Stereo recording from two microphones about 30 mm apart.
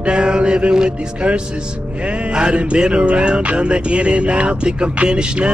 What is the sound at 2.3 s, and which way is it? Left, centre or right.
Music, right.